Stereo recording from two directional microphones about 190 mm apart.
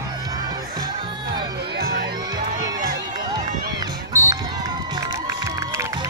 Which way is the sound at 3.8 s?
20° right (ahead or behind).